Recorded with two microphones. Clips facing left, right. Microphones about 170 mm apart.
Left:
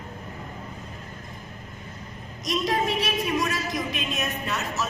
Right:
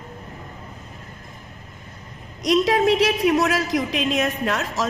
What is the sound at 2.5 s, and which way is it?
A woman's voice, 85° right.